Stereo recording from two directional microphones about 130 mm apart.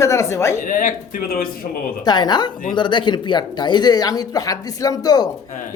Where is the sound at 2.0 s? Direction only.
35° left (ahead or behind).